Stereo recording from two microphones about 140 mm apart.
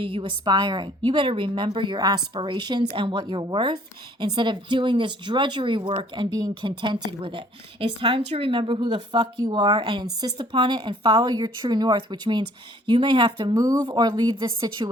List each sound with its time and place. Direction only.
0.0 s a woman's voice: 40° right (ahead or behind)
13.6 s a woman's voice: 25° right (ahead or behind)